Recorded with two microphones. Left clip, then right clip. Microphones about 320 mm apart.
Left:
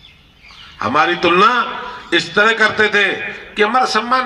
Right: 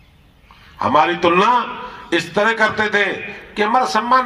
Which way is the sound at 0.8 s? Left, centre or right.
Right.